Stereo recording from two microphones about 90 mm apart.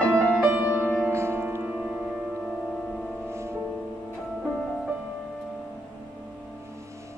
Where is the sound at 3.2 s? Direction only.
30° right (ahead or behind).